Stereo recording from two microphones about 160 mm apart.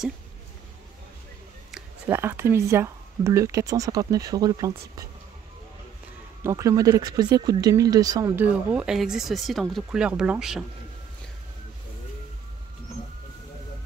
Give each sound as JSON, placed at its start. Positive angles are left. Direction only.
{"t": 2.0, "sound": "speech", "side_deg": -15}
{"t": 6.4, "sound": "speech", "side_deg": -20}
{"t": 8.5, "sound": "speech", "side_deg": -5}